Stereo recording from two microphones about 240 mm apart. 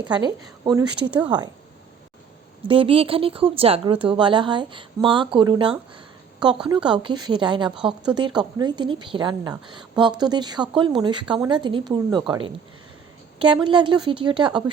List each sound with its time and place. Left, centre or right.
0.0 s speech: centre
2.6 s speech: right